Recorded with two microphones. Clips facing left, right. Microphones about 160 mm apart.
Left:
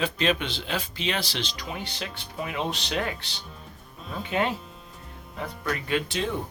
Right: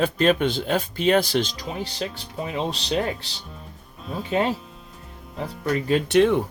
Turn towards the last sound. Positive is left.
turn(degrees=-65)  # may be behind; listen again after turning